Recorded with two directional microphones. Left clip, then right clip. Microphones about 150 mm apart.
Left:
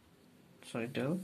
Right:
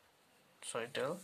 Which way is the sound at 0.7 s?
25° right (ahead or behind).